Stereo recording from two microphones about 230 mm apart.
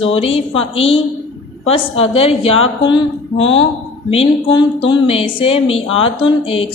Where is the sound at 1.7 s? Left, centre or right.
Left.